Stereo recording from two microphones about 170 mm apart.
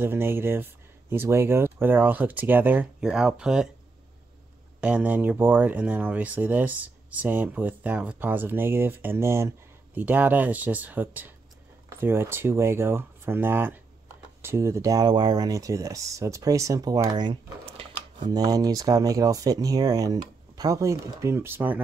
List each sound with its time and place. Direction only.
0.0 s speech: 15° right (ahead or behind)
4.7 s speech: 5° right (ahead or behind)